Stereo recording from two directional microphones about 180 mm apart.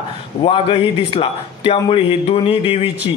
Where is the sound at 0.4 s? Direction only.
30° left (ahead or behind).